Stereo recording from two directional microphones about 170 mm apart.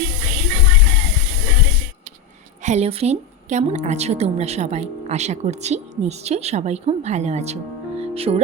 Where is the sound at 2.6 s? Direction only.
40° right (ahead or behind).